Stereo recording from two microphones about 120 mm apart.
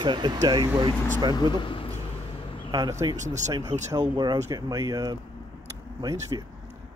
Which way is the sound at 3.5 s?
30° right (ahead or behind).